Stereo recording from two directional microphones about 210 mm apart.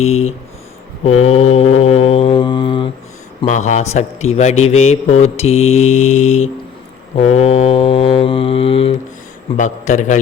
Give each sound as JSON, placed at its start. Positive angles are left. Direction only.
{"t": 1.0, "sound": "mantra", "side_deg": 30}
{"t": 3.4, "sound": "mantra", "side_deg": 35}